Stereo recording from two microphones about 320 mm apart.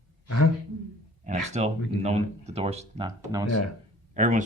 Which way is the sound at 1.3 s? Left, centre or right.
Right.